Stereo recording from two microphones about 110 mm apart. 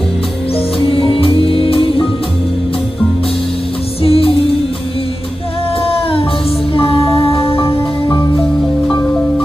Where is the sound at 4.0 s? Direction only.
60° left (ahead or behind).